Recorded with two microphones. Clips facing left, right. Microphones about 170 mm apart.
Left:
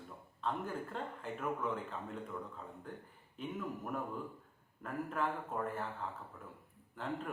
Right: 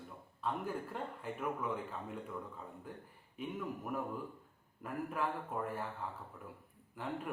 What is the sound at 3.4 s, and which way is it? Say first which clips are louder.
Speech: even; 5° right (ahead or behind).